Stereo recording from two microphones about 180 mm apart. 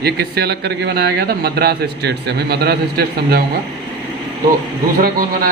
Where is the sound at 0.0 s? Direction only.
65° right (ahead or behind).